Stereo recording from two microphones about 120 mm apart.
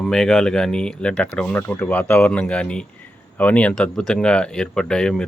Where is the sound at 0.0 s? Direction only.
5° left (ahead or behind).